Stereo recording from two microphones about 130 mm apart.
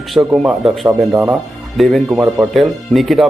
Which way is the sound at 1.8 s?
Centre (ahead or behind).